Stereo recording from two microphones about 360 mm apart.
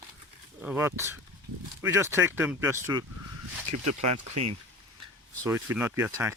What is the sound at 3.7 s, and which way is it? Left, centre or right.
Speech, right.